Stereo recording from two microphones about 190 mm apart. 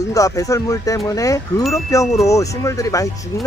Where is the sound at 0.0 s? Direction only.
15° left (ahead or behind).